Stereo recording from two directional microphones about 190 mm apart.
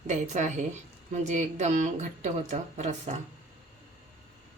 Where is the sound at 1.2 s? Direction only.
40° right (ahead or behind).